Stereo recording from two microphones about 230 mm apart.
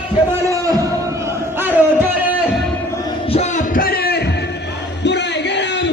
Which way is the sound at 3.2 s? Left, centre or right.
Left.